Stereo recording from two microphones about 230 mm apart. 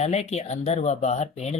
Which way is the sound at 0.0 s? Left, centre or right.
Left.